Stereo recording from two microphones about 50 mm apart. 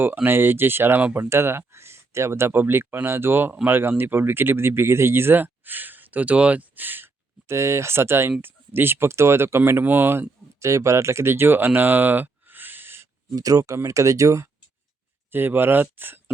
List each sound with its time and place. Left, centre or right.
0.0 s speech: right
7.4 s speech: right
8.4 s speech: right
10.6 s speech: right
13.6 s speech: right
15.3 s speech: right